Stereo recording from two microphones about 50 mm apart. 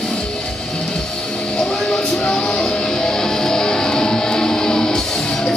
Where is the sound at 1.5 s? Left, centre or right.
Centre.